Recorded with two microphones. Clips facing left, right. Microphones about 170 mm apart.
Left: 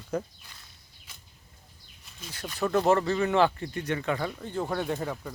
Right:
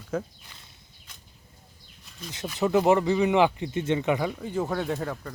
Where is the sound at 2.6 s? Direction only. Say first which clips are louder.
Right 3 dB; 15° right (ahead or behind).